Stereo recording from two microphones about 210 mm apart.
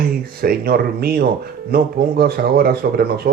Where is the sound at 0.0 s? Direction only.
45° right (ahead or behind).